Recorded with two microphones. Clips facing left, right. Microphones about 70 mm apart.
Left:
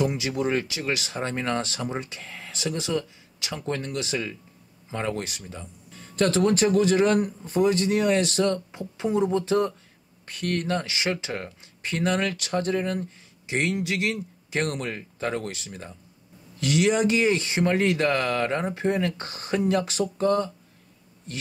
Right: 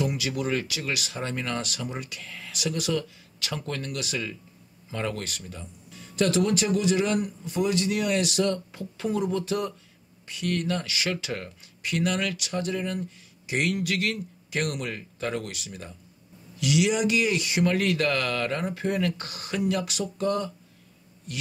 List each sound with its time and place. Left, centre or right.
0.0 s speech: left
5.6 s speech: left
8.7 s speech: left
10.2 s speech: left
13.5 s speech: left